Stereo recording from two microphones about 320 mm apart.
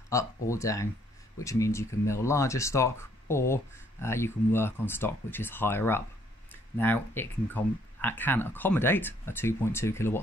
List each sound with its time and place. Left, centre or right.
0.1 s speech: centre